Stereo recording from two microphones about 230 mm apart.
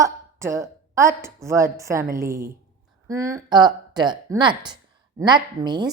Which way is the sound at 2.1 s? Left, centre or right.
Centre.